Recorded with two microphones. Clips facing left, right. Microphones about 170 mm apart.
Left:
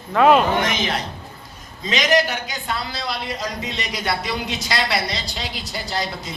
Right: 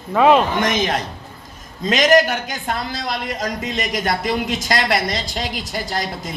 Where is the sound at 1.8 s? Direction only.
50° right (ahead or behind).